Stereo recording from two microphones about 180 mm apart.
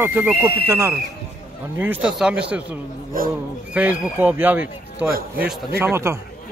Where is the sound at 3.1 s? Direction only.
50° right (ahead or behind).